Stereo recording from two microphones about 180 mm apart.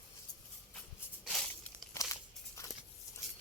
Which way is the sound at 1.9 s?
15° left (ahead or behind).